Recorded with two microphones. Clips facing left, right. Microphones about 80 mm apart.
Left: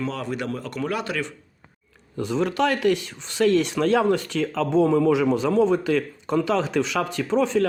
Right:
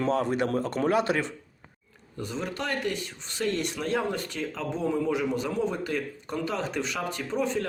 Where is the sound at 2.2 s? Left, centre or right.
Left.